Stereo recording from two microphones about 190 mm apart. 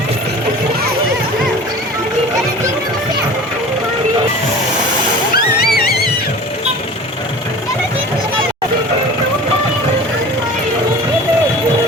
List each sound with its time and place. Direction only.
5.3 s music: 55° left (ahead or behind)